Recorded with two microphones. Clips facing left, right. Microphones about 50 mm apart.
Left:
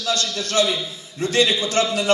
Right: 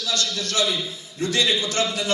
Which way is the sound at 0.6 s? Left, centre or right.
Centre.